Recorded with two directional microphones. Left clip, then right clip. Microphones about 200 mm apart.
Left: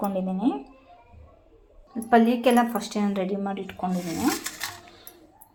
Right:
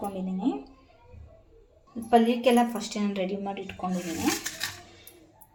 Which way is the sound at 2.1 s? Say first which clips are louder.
Left 2 dB; 20° left (ahead or behind).